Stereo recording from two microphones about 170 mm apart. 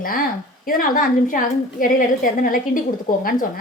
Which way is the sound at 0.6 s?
55° left (ahead or behind).